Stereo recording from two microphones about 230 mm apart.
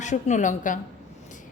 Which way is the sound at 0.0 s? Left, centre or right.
Left.